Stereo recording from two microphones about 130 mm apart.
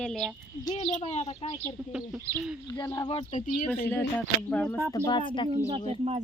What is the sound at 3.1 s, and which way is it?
Speech, 50° left (ahead or behind).